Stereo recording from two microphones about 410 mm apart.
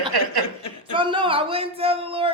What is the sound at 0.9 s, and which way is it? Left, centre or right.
Speech, centre.